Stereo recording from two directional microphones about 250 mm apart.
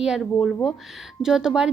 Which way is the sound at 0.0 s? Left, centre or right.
Centre.